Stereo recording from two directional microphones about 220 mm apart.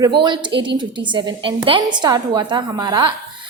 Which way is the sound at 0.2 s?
20° right (ahead or behind).